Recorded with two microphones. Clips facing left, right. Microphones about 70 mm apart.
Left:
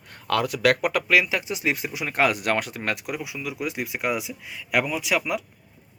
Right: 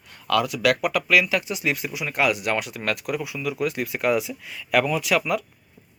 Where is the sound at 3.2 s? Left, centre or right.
Centre.